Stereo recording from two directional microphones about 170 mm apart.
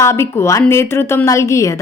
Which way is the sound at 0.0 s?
15° left (ahead or behind).